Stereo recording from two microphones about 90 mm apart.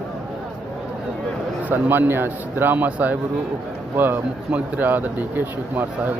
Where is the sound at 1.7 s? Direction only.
20° right (ahead or behind).